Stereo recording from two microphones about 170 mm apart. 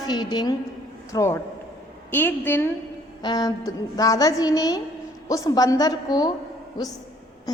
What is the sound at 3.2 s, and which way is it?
A woman's voice, 25° left (ahead or behind).